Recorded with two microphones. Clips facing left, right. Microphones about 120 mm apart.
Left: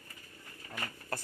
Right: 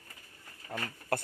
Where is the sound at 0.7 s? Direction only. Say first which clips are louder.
Right 6 dB; 60° right (ahead or behind).